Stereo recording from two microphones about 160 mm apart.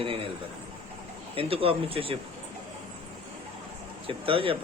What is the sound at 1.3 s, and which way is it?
Speech, 35° right (ahead or behind).